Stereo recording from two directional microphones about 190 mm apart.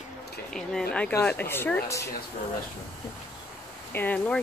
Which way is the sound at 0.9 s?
5° left (ahead or behind).